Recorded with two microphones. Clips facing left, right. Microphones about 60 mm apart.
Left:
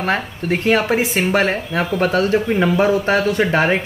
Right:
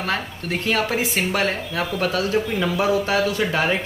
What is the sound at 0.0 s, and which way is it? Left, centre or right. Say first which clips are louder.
Speech: left 5 dB; left.